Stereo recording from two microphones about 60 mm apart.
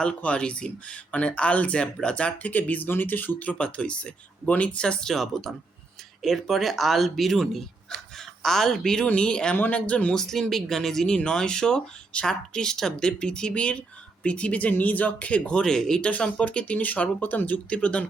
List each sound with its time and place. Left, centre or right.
0.0 s speech: centre
10.2 s speech: centre
16.0 s speech: centre